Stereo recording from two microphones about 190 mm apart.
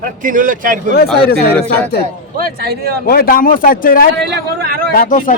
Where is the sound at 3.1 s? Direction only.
50° left (ahead or behind).